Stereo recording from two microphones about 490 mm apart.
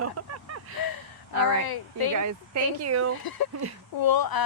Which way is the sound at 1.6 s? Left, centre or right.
Left.